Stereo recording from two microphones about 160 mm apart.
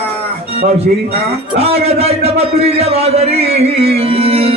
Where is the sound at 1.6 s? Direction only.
40° right (ahead or behind).